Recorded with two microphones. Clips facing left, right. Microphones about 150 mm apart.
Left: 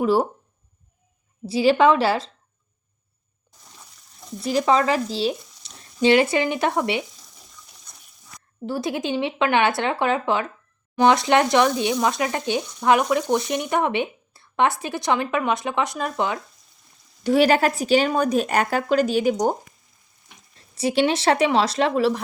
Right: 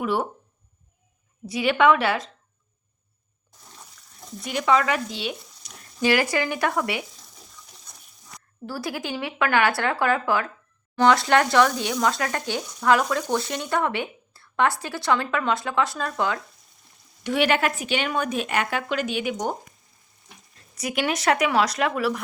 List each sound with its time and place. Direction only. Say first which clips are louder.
0.0 s a woman's voice: left 6 dB; 30° left (ahead or behind)
1.5 s a woman's voice: left 3 dB; 30° left (ahead or behind)
4.4 s speech: left 3 dB; 35° left (ahead or behind)
8.6 s speech: left 5 dB; 20° left (ahead or behind)
17.2 s a woman's voice: left 5 dB; 35° left (ahead or behind)
20.7 s speech: left 6 dB; 30° left (ahead or behind)